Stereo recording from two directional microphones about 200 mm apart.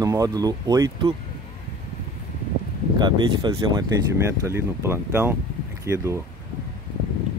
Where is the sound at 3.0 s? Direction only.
20° right (ahead or behind).